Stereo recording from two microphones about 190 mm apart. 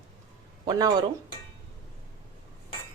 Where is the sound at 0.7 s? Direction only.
20° right (ahead or behind).